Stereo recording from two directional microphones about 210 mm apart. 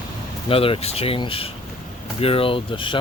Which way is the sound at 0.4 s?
25° left (ahead or behind).